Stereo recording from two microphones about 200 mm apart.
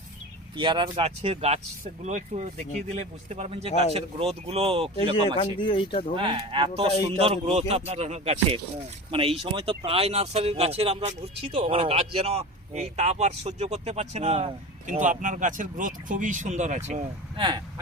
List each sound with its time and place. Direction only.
0.5 s a man's voice: 25° right (ahead or behind)
5.4 s speech: 25° left (ahead or behind)
6.1 s a man's voice: 25° right (ahead or behind)
17.3 s speech: 25° right (ahead or behind)